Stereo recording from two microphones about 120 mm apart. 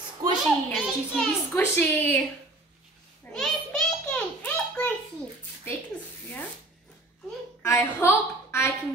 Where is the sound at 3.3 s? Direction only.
5° left (ahead or behind).